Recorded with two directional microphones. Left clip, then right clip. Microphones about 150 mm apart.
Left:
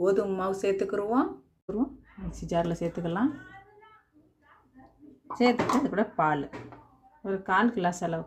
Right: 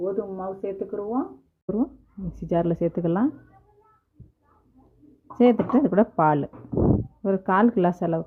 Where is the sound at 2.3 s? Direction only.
40° right (ahead or behind).